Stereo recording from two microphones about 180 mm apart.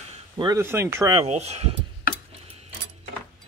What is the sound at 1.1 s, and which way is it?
Speech, 35° right (ahead or behind).